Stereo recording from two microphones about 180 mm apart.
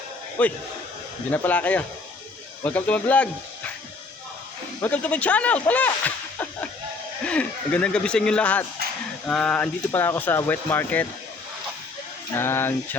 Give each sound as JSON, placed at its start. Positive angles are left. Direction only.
{"t": 0.4, "sound": "speech", "side_deg": 10}
{"t": 4.8, "sound": "speech", "side_deg": 10}
{"t": 12.3, "sound": "speech", "side_deg": 15}